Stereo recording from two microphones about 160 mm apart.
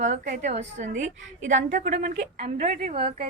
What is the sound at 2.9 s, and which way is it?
Speech, 35° right (ahead or behind).